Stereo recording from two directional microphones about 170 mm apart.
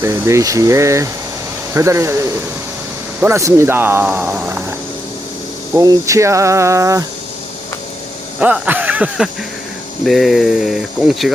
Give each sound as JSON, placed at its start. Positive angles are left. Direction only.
{"t": 0.0, "sound": "speech", "side_deg": -15}
{"t": 5.7, "sound": "speech", "side_deg": -20}
{"t": 8.4, "sound": "speech", "side_deg": -10}